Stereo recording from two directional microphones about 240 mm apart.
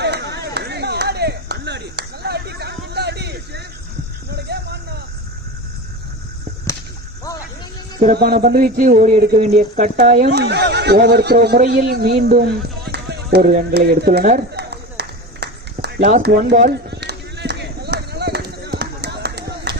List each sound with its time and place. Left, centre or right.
0.0 s a sound: right
8.0 s speech: right
10.3 s a man's voice: right
16.2 s run: right